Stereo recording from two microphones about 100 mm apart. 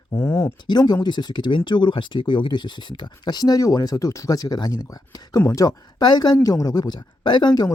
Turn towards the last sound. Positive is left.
turn(degrees=45)  # may be behind; listen again after turning